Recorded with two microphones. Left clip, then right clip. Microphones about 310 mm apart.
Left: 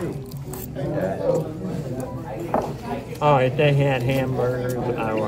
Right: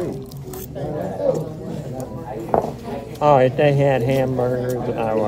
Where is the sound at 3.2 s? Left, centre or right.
Right.